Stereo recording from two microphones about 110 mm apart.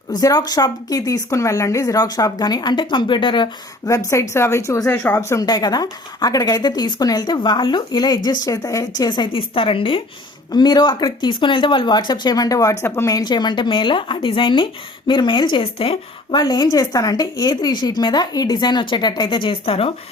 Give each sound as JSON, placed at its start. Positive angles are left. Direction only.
{"t": 0.1, "sound": "speech", "side_deg": 35}
{"t": 4.1, "sound": "a woman's voice", "side_deg": 25}
{"t": 5.5, "sound": "speech", "side_deg": 40}
{"t": 10.5, "sound": "speech", "side_deg": 40}
{"t": 16.4, "sound": "speech", "side_deg": 35}